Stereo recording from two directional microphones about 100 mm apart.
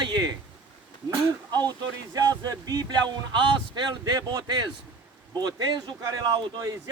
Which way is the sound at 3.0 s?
50° right (ahead or behind).